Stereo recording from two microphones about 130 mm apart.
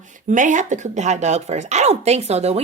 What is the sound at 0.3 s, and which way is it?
A woman's voice, 75° right (ahead or behind).